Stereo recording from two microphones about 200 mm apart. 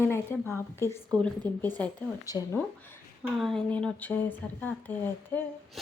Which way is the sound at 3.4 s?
Centre (ahead or behind).